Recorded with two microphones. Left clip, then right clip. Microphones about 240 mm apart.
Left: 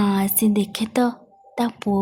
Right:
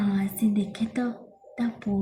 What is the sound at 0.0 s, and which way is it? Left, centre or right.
A woman's voice, left.